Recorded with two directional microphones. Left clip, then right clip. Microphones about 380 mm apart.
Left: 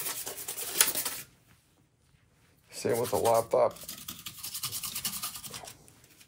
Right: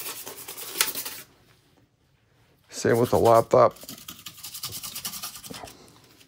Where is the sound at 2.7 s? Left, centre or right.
Right.